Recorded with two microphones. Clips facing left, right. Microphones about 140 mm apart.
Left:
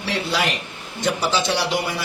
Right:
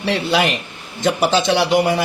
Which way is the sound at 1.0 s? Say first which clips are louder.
Right 5 dB; 55° right (ahead or behind).